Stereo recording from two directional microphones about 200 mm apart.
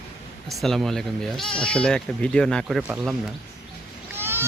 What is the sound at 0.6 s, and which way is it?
Speech, centre (ahead or behind).